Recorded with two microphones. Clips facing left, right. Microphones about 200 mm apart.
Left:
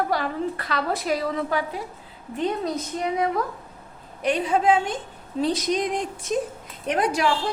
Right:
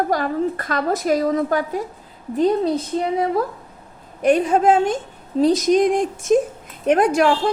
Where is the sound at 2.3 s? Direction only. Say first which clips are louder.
Right 8 dB; 35° right (ahead or behind).